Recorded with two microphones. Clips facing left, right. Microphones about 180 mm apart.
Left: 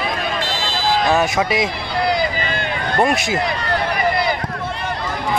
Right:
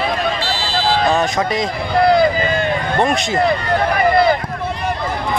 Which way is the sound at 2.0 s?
55° right (ahead or behind).